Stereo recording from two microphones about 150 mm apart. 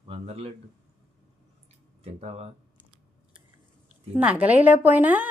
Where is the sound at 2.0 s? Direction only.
45° right (ahead or behind).